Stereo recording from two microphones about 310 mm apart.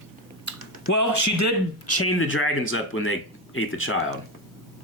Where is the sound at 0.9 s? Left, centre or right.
Left.